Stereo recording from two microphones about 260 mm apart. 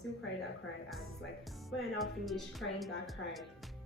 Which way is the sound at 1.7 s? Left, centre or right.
Centre.